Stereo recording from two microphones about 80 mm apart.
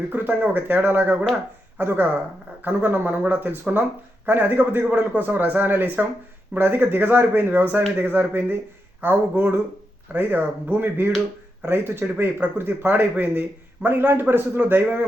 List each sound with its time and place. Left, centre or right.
0.1 s speech: centre